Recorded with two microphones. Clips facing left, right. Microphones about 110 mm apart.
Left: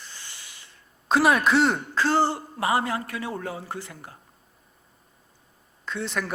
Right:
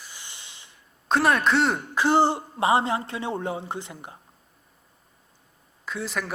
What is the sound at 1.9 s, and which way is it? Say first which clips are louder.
A man's voice: right 5 dB; 20° right (ahead or behind).